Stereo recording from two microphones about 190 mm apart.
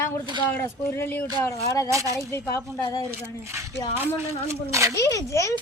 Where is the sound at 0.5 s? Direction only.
10° left (ahead or behind).